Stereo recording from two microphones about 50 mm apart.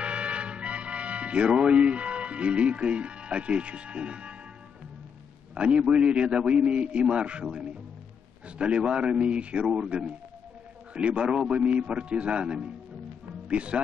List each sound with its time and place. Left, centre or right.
0.0 s music: right
5.5 s a man's voice: right